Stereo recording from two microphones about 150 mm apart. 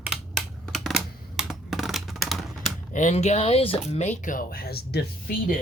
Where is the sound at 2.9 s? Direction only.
50° left (ahead or behind); by 5.5 s 80° left.